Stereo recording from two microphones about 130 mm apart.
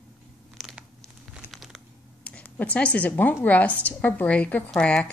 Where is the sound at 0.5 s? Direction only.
Centre (ahead or behind).